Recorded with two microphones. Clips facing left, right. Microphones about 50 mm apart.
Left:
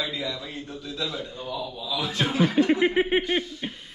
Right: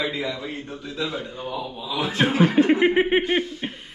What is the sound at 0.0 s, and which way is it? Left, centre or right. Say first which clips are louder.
A man's voice: right 4 dB; right.